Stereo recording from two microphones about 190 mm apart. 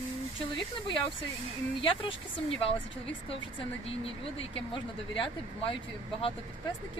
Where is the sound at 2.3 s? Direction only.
30° left (ahead or behind).